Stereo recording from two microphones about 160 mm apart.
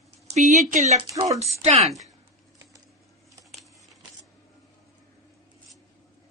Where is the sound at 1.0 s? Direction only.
25° right (ahead or behind).